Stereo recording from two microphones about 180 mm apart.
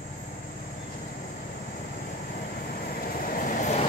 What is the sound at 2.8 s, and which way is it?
Vehicle, 55° left (ahead or behind).